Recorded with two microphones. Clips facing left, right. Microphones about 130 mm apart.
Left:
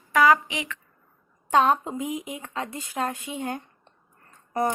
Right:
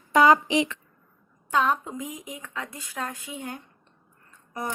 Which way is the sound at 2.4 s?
35° left (ahead or behind).